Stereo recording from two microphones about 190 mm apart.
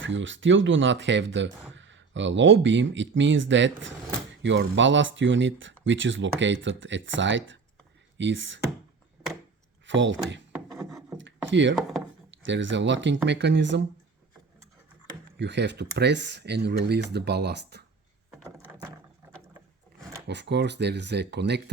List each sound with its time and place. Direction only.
0.0 s speech: 80° right
9.8 s speech: 75° right (ahead or behind)
10.5 s wood: centre (ahead or behind)
11.7 s speech: centre (ahead or behind)
12.3 s speech: 75° right (ahead or behind)
15.4 s speech: 65° right (ahead or behind)
20.2 s speech: 65° right (ahead or behind)